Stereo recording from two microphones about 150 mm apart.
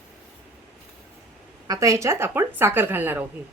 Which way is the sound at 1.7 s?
20° right (ahead or behind).